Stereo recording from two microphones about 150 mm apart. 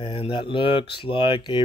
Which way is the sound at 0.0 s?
35° left (ahead or behind).